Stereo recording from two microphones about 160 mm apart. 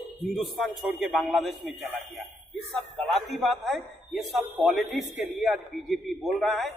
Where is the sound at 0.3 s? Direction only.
Centre (ahead or behind).